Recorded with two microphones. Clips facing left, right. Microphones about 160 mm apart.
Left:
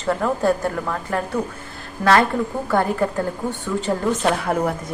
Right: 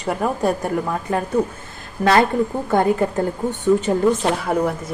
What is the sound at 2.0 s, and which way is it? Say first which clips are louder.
Speech: right 1 dB; 25° right (ahead or behind).